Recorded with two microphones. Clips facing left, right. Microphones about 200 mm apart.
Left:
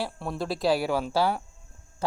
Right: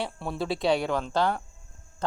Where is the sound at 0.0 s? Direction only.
Centre (ahead or behind).